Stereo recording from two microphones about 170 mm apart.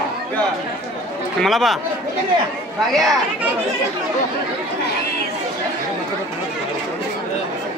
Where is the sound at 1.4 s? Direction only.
Centre (ahead or behind).